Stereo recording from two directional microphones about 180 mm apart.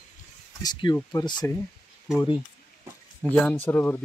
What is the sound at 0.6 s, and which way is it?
Speech, 25° left (ahead or behind).